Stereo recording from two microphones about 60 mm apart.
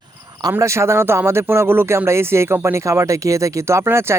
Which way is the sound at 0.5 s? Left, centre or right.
Right.